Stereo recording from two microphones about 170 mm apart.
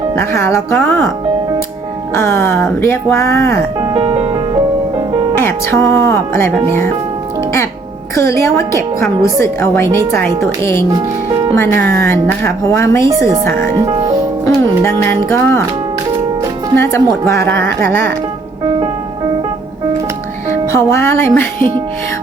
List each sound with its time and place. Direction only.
0.2 s a woman's voice: 15° left (ahead or behind)
2.1 s a woman's voice: 15° left (ahead or behind)
3.8 s music: 30° right (ahead or behind)
5.4 s a woman's voice: 15° left (ahead or behind)
8.1 s a woman's voice: 15° left (ahead or behind)
13.1 s speech: 20° right (ahead or behind)
13.4 s a woman's voice: 15° left (ahead or behind)
13.7 s speech: 20° right (ahead or behind)
14.4 s music: 15° left (ahead or behind)
16.7 s a woman's voice: 15° left (ahead or behind)
20.7 s a woman's voice: 15° left (ahead or behind)